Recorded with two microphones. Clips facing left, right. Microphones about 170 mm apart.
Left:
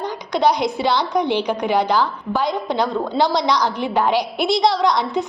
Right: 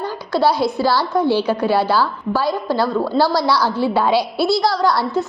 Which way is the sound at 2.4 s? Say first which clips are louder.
Right 1 dB; 5° right (ahead or behind).